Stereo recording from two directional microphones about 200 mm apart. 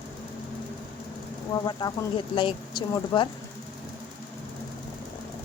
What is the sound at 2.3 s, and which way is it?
Speech, 25° left (ahead or behind).